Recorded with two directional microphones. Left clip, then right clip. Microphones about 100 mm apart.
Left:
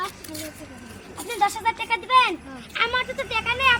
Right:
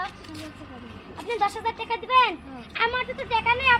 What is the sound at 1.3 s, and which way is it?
A woman's voice, 35° right (ahead or behind).